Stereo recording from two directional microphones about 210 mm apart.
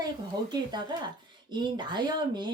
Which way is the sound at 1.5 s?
20° right (ahead or behind).